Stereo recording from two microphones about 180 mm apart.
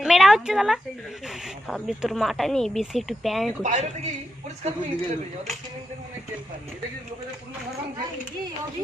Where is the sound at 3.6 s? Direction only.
40° right (ahead or behind).